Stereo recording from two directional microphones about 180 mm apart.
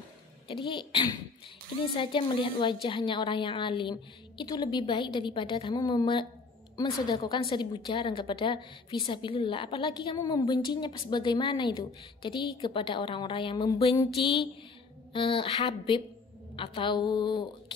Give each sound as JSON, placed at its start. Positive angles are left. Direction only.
{"t": 0.5, "sound": "a woman's voice", "side_deg": 25}